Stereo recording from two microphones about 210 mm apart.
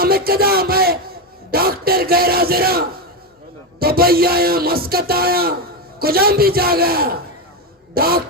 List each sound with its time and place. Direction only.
0.0 s a man's voice: 45° right (ahead or behind)